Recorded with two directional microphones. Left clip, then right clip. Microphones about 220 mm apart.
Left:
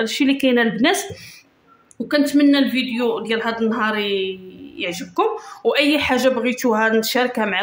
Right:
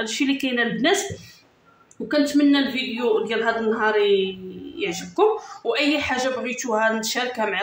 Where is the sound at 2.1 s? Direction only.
45° left (ahead or behind).